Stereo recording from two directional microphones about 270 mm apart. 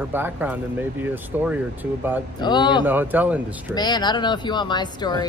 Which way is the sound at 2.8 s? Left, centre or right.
Centre.